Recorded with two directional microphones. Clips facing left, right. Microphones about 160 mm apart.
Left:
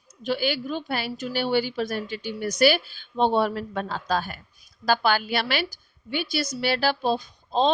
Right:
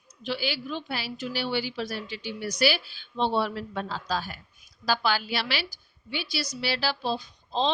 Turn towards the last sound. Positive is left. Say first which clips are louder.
# left 5 dB
turn(degrees=45)  # may be behind; listen again after turning